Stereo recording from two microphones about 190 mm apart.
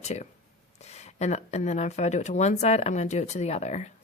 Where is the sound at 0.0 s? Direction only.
35° left (ahead or behind).